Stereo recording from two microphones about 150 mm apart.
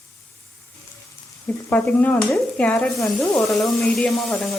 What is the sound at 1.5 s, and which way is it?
Speech, 10° left (ahead or behind).